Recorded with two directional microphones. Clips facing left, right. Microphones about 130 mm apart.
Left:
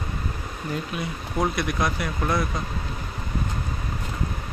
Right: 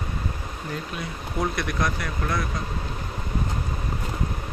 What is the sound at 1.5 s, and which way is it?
Speech, 5° left (ahead or behind).